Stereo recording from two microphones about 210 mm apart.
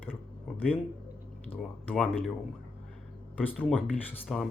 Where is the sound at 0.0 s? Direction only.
10° left (ahead or behind).